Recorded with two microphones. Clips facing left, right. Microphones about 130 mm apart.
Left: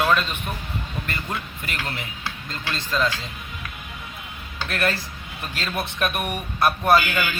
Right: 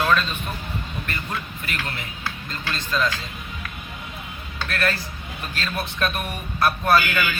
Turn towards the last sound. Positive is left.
turn(degrees=20)  # may be behind; listen again after turning